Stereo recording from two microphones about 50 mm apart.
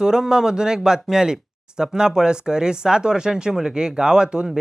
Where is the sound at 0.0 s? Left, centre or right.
Centre.